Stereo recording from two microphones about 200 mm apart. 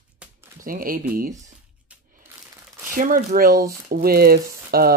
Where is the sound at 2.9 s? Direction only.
45° right (ahead or behind).